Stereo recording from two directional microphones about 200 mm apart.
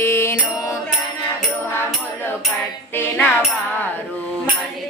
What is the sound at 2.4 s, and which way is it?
Mantra, 10° left (ahead or behind).